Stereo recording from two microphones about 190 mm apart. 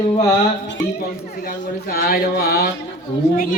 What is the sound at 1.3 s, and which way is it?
Speech, 45° left (ahead or behind).